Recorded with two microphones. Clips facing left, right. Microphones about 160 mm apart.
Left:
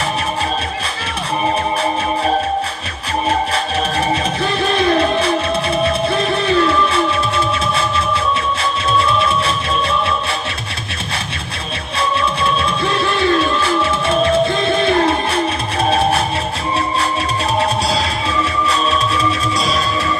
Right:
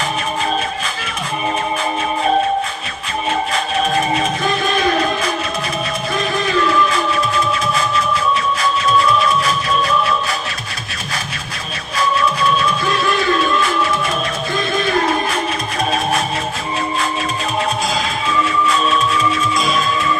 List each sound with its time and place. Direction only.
3.2 s music: 35° left (ahead or behind)
11.9 s music: 30° left (ahead or behind)
19.5 s music: 35° left (ahead or behind)